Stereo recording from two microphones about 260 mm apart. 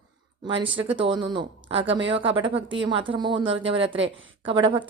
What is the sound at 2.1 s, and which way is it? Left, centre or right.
Speech, centre.